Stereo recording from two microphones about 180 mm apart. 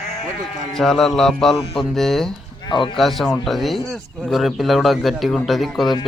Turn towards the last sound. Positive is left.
turn(degrees=0)  # may be behind; listen again after turning